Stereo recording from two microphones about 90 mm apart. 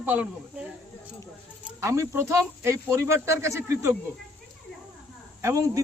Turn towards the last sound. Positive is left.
turn(degrees=-35)  # may be behind; listen again after turning